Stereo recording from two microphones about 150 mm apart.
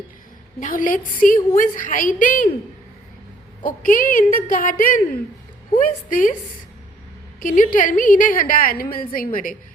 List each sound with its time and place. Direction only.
0.6 s a woman's voice: 65° left (ahead or behind)
3.6 s a woman's voice: 65° left (ahead or behind)
7.4 s a woman's voice: 60° left (ahead or behind)